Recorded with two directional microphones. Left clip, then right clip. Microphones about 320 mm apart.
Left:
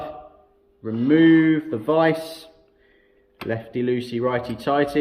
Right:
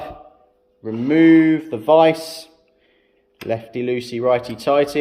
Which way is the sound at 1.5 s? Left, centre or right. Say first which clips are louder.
Right 6 dB; centre.